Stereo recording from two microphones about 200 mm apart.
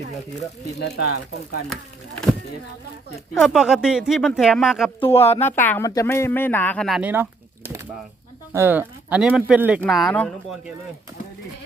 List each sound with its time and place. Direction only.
0.8 s speech: 55° left (ahead or behind)
3.3 s speech: centre (ahead or behind)
4.9 s speech: 10° left (ahead or behind)